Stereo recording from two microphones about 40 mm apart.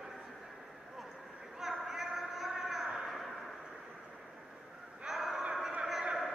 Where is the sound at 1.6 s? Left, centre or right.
Centre.